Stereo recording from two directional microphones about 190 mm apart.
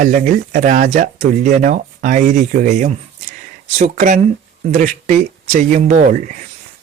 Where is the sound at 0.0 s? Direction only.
40° right (ahead or behind).